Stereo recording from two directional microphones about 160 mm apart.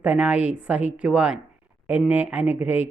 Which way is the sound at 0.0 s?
10° right (ahead or behind).